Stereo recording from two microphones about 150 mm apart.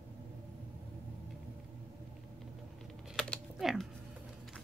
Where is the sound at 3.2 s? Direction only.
Centre (ahead or behind).